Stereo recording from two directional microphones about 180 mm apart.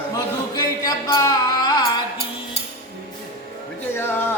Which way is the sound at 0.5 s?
20° left (ahead or behind).